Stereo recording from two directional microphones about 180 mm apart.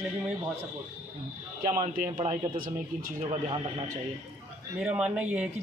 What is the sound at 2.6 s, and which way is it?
Speech, 50° right (ahead or behind).